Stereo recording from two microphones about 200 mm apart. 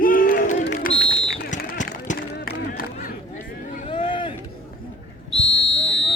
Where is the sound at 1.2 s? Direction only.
40° left (ahead or behind).